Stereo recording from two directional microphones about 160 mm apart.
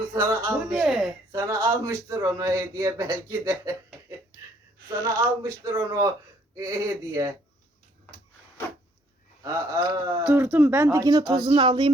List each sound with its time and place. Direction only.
0.1 s speech: 20° right (ahead or behind)
0.7 s speech: centre (ahead or behind)
1.3 s speech: 20° right (ahead or behind)
4.9 s speech: 20° right (ahead or behind)
9.4 s speech: 20° right (ahead or behind)
10.2 s speech: 10° right (ahead or behind); by 11.9 s 30° right (ahead or behind)